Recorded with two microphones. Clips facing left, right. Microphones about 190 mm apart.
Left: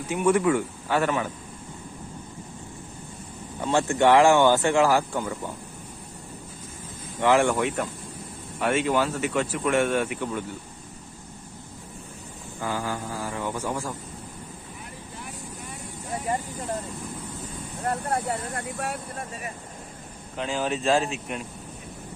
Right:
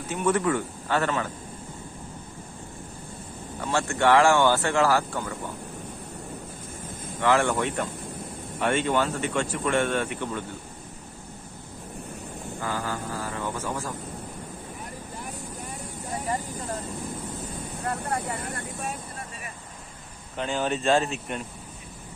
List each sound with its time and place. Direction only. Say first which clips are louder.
0.1 s speech: left 3 dB; 10° left (ahead or behind)
3.6 s speech: left 3 dB; 20° left (ahead or behind)
7.2 s speech: left 2 dB; 15° left (ahead or behind)
12.6 s speech: left 2 dB; 15° left (ahead or behind)
18.5 s speech: left 3 dB; 70° left (ahead or behind)
20.3 s speech: even; centre (ahead or behind)